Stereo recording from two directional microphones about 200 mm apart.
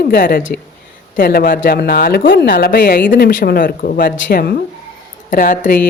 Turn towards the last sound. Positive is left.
turn(degrees=40)  # may be behind; listen again after turning